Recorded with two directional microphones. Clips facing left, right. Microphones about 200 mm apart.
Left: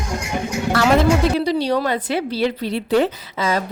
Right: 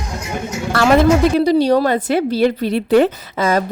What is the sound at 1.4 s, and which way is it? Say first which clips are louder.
A woman's voice: right 6 dB; 45° right (ahead or behind).